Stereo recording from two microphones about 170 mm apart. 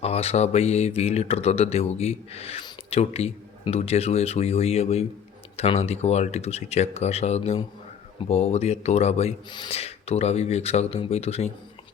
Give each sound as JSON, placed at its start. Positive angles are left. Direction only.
{"t": 0.0, "sound": "speech", "side_deg": 35}